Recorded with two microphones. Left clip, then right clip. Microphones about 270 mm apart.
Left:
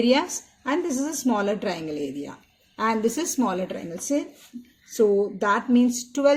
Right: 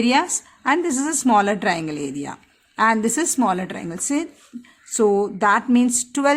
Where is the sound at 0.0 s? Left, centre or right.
Right.